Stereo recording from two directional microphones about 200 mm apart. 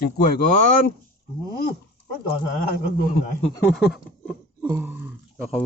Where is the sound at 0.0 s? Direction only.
45° left (ahead or behind).